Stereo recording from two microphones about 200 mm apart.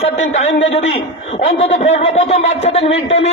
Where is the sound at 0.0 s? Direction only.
35° left (ahead or behind).